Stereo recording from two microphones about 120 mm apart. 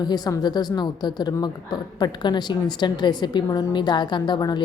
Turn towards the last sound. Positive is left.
turn(degrees=35)  # may be behind; listen again after turning